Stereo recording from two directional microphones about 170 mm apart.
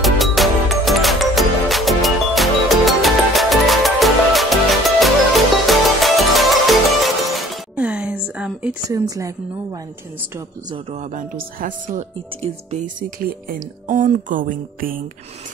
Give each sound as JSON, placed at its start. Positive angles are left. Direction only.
{"t": 0.0, "sound": "music", "side_deg": 0}
{"t": 7.7, "sound": "a sound", "side_deg": -10}
{"t": 8.8, "sound": "a woman's voice", "side_deg": -20}
{"t": 10.7, "sound": "a man's voice", "side_deg": -35}
{"t": 11.1, "sound": "speech", "side_deg": -50}